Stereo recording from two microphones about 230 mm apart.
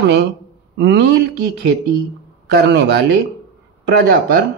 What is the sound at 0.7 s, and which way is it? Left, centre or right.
Speech, right.